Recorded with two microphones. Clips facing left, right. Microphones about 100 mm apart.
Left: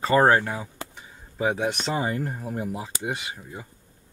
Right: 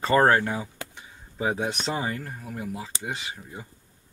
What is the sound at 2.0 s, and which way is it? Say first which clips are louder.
Speech: left 4 dB; 25° left (ahead or behind).